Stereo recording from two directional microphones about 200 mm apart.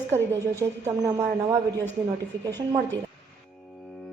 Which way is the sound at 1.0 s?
15° right (ahead or behind).